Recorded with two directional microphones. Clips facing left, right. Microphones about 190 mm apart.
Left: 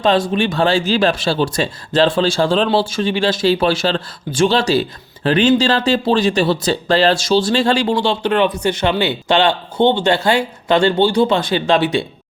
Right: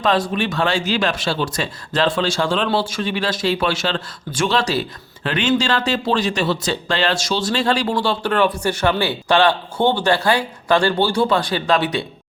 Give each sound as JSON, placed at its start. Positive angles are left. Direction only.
{"t": 0.0, "sound": "speech", "side_deg": 25}